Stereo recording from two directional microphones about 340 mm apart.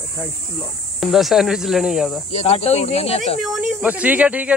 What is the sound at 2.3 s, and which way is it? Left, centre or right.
Speech, centre.